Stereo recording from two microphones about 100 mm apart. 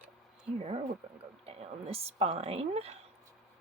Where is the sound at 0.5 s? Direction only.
90° right.